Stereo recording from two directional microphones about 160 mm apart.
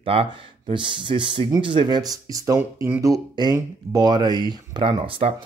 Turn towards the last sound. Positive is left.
turn(degrees=-35)  # may be behind; listen again after turning